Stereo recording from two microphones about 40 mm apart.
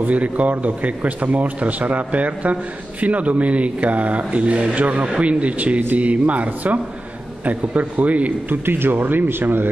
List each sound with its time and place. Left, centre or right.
0.0 s a man's voice: right
8.6 s speech: right